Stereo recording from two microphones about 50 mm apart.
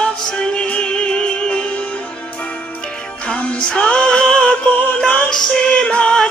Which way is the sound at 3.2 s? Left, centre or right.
Left.